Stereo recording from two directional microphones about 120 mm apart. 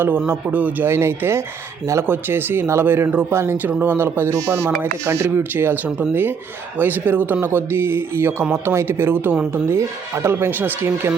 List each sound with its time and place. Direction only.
0.3 s speech: 15° right (ahead or behind)